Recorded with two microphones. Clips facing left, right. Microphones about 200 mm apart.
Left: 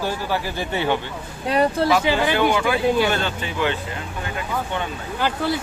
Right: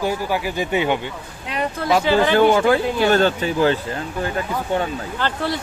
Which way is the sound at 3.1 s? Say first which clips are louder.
Right 8 dB; 40° right (ahead or behind).